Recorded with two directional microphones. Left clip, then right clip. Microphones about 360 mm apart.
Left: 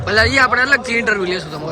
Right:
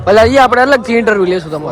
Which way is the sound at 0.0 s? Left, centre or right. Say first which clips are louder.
Right 7 dB; centre.